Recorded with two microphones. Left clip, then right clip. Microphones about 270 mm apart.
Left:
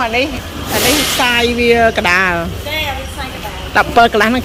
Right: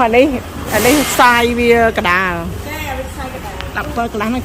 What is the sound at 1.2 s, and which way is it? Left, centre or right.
Speech, centre.